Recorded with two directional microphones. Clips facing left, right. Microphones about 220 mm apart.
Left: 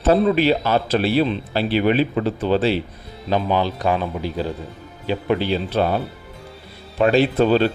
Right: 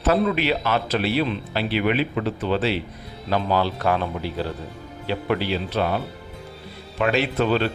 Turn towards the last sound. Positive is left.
turn(degrees=35)  # may be behind; listen again after turning